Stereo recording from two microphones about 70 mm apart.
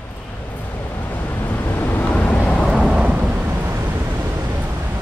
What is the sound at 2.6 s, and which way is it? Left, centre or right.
Vehicle, centre.